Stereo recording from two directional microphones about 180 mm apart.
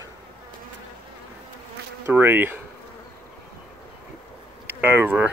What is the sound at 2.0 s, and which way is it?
Speech, 10° right (ahead or behind).